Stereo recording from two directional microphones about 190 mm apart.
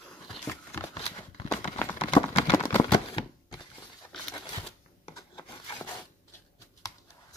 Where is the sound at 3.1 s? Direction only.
20° left (ahead or behind).